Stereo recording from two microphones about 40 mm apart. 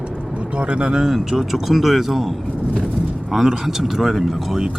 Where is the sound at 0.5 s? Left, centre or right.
Right.